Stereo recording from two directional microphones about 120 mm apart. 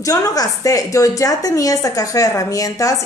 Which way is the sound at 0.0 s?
30° left (ahead or behind).